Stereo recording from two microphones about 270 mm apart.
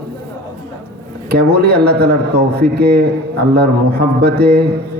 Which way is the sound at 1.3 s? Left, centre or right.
Right.